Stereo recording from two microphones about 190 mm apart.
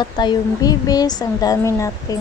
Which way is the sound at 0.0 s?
25° left (ahead or behind).